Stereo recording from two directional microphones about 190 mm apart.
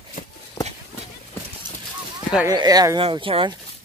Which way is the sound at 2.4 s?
20° right (ahead or behind).